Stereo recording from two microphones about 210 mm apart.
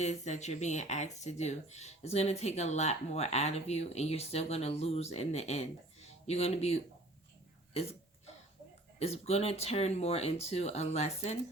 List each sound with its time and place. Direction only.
0.0 s speech: 35° left (ahead or behind)
9.0 s speech: 30° left (ahead or behind)